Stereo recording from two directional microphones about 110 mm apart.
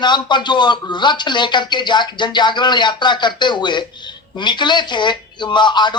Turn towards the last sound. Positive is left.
turn(degrees=45)  # may be behind; listen again after turning